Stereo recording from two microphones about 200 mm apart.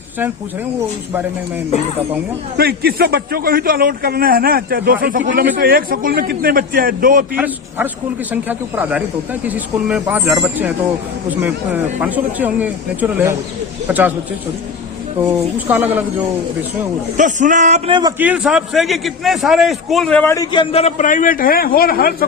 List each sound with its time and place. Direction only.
2.6 s a man's voice: 50° right (ahead or behind)
7.3 s speech: 10° right (ahead or behind)
15.2 s speech: 10° right (ahead or behind)
17.2 s speech: 40° right (ahead or behind)
18.2 s a man's voice: 5° right (ahead or behind); by 22.1 s 50° left (ahead or behind)